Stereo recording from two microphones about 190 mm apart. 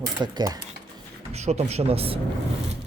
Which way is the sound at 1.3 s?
35° right (ahead or behind).